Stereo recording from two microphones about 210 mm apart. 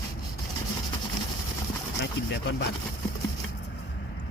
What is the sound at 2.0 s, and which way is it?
Speech, 55° left (ahead or behind).